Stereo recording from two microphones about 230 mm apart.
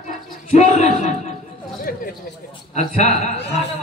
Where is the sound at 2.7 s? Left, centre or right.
Left.